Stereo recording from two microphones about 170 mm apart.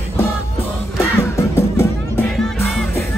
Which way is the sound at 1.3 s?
15° left (ahead or behind).